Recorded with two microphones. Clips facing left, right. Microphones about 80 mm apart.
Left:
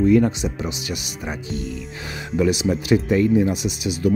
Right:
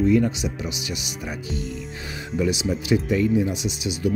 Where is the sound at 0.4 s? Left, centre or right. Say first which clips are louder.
Left 3 dB; left.